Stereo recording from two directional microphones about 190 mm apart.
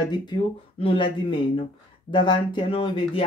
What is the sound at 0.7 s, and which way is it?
Speech, 30° left (ahead or behind).